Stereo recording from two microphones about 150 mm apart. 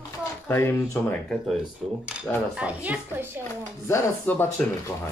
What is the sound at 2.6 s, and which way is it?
Speech, 10° right (ahead or behind).